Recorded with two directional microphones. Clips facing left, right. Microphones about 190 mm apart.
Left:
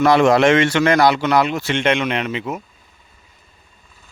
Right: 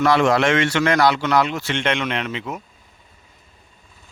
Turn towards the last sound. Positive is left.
turn(degrees=10)  # may be behind; listen again after turning